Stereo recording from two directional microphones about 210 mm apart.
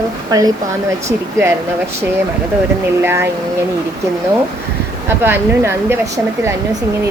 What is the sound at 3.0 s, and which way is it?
Speech, 10° right (ahead or behind).